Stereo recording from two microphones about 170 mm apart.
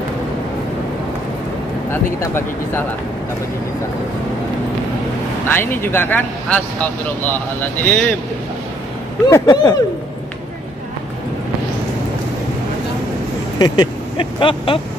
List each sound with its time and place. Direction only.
1.9 s speech: 15° left (ahead or behind)
5.5 s speech: 15° left (ahead or behind)
9.3 s speech: 20° left (ahead or behind)
13.6 s speech: 30° left (ahead or behind)